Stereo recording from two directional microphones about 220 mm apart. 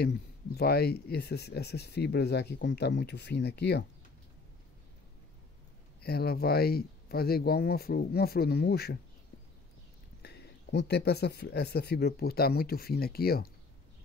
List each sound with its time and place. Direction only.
0.0 s speech: 45° left (ahead or behind)
6.0 s speech: 45° left (ahead or behind)
10.2 s speech: 50° left (ahead or behind)